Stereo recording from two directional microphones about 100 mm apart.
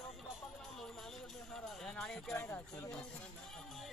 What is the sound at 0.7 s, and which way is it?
Music, 5° left (ahead or behind).